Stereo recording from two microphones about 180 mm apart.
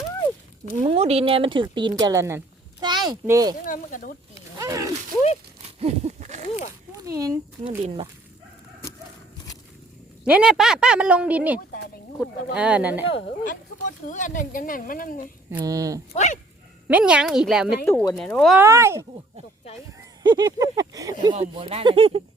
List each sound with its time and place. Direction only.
0.8 s speech: 35° right (ahead or behind); by 3.5 s 20° right (ahead or behind)
3.7 s speech: 50° left (ahead or behind)
4.5 s a sound: 20° right (ahead or behind)
5.8 s a sound: 40° right (ahead or behind)
6.9 s speech: 20° right (ahead or behind)
10.2 s a woman's voice: 5° right (ahead or behind)
13.4 s speech: 45° left (ahead or behind)
15.4 s speech: 20° right (ahead or behind)
16.1 s speech: 40° left (ahead or behind)
16.9 s a woman's voice: 5° right (ahead or behind)
18.6 s speech: 15° right (ahead or behind); by 22.2 s 30° right (ahead or behind)